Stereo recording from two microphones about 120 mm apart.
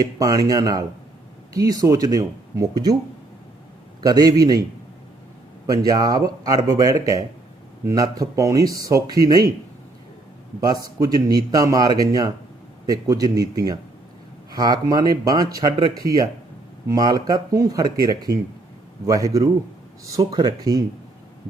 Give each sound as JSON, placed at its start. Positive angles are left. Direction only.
{"t": 0.0, "sound": "speech", "side_deg": -30}
{"t": 4.0, "sound": "speech", "side_deg": -30}
{"t": 5.6, "sound": "speech", "side_deg": -30}
{"t": 10.6, "sound": "speech", "side_deg": -30}